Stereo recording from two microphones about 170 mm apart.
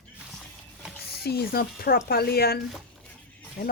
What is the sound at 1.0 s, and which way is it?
Speech, 65° left (ahead or behind).